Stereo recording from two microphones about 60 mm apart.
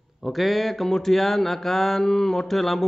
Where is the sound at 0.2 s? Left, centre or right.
Centre.